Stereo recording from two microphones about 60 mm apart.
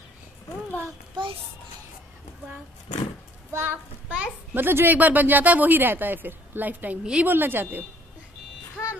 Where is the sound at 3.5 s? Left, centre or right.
Right.